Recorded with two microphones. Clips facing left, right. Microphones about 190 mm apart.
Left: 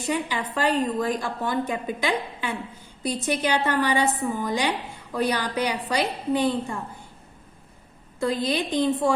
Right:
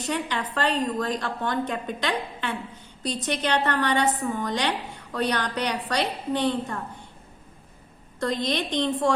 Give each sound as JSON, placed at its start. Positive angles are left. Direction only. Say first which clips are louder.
{"t": 0.0, "sound": "a woman's voice", "louder": "left 1 dB", "side_deg": 10}
{"t": 8.2, "sound": "a woman's voice", "louder": "left 2 dB", "side_deg": 5}